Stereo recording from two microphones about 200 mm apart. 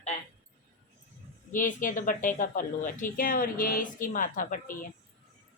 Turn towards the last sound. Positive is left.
turn(degrees=40)  # may be behind; listen again after turning